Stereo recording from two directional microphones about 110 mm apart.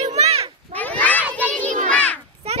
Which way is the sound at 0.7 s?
15° left (ahead or behind).